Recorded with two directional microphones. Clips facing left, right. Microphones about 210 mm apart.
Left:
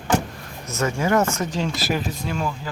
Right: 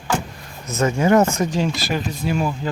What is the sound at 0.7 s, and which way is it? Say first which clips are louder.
Speech: right 5 dB; 20° right (ahead or behind).